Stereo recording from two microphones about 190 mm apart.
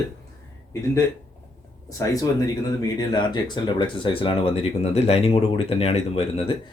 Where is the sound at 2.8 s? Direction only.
20° left (ahead or behind).